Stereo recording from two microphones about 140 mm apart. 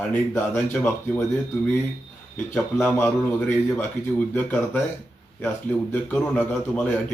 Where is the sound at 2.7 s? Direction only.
15° left (ahead or behind).